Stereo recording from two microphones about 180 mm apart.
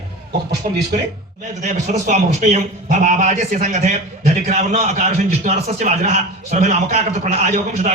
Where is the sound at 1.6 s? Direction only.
40° right (ahead or behind).